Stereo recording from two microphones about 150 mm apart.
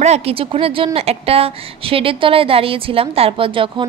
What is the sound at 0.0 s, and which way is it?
A woman's voice, 45° right (ahead or behind).